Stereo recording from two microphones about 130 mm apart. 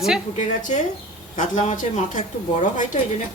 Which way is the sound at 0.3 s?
75° left (ahead or behind).